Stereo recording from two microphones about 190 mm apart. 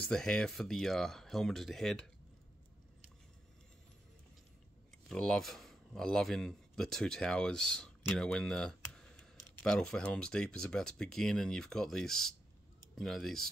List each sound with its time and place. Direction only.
0.0 s speech: 5° left (ahead or behind)
5.0 s speech: 5° left (ahead or behind)